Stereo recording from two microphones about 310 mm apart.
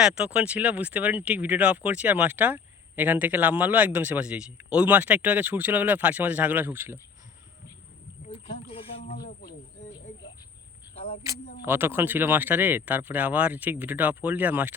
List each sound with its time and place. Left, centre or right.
0.0 s speech: centre
8.4 s wild animals: left
9.1 s speech: left
10.9 s speech: centre
11.2 s speech: centre